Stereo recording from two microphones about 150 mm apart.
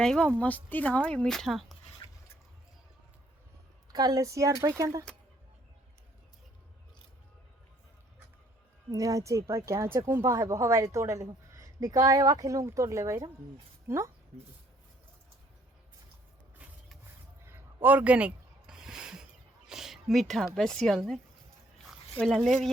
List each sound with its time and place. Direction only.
0.0 s speech: 5° left (ahead or behind)
3.9 s speech: 25° right (ahead or behind)
8.9 s speech: 20° right (ahead or behind)
17.4 s a sound: 15° right (ahead or behind)
19.6 s speech: 5° right (ahead or behind)
21.8 s a sound: centre (ahead or behind)
22.4 s speech: centre (ahead or behind)